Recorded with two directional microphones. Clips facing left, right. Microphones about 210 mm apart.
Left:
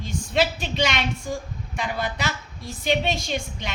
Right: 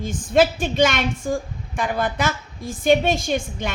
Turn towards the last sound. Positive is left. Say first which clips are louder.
# right 5 dB
turn(degrees=-50)  # may be behind; listen again after turning